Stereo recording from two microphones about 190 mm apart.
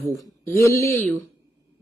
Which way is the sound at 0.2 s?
15° left (ahead or behind).